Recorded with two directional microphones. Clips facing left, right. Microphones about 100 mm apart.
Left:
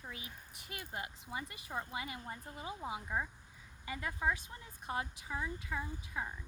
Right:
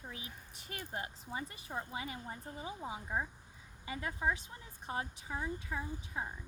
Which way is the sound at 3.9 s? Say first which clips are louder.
Even; 20° right (ahead or behind).